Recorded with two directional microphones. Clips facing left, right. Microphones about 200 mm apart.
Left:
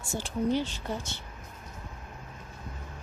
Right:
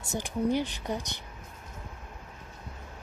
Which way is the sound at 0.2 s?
15° right (ahead or behind).